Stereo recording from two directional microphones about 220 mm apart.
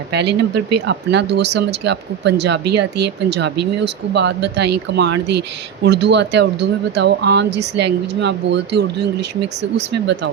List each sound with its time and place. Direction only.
0.1 s speech: 50° right (ahead or behind)